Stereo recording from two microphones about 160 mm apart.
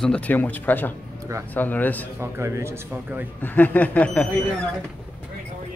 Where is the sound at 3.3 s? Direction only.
10° left (ahead or behind).